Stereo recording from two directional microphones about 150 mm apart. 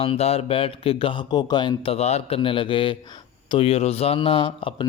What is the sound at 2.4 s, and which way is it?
Speech, 35° left (ahead or behind).